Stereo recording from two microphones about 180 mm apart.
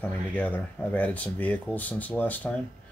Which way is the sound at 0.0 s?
10° left (ahead or behind).